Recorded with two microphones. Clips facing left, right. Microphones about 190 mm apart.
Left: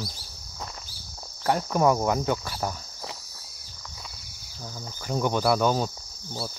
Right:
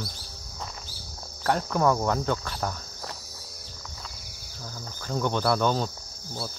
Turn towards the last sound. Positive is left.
turn(degrees=10)  # may be behind; listen again after turning